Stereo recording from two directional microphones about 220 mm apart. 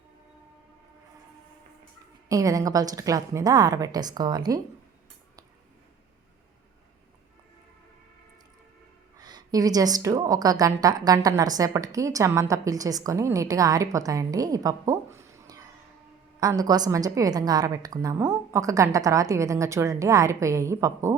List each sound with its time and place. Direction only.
2.3 s a woman's voice: 15° right (ahead or behind)
9.1 s a woman's voice: 20° right (ahead or behind)